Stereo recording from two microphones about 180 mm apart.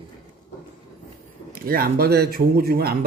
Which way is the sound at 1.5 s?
55° right (ahead or behind).